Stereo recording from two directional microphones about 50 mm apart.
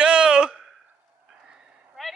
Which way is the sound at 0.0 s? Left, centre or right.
Centre.